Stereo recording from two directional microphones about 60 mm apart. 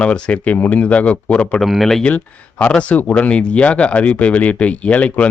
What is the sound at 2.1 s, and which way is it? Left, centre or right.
Speech, left.